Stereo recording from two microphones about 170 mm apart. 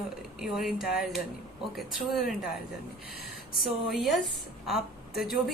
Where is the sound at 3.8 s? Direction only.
Centre (ahead or behind).